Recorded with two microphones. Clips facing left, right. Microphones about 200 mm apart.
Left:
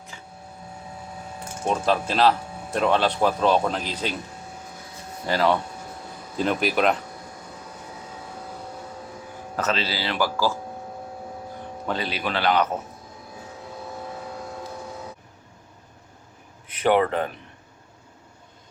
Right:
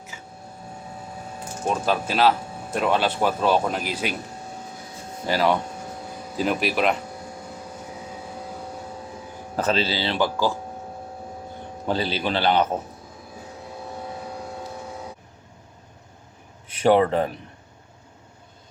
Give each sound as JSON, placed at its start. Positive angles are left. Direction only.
{"t": 0.1, "sound": "printer", "side_deg": -10}
{"t": 1.6, "sound": "speech", "side_deg": -5}
{"t": 5.2, "sound": "speech", "side_deg": -15}
{"t": 9.6, "sound": "speech", "side_deg": -30}
{"t": 11.9, "sound": "speech", "side_deg": -30}
{"t": 16.8, "sound": "speech", "side_deg": -30}